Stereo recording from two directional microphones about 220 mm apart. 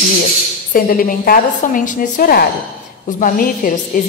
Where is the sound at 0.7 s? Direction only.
40° left (ahead or behind).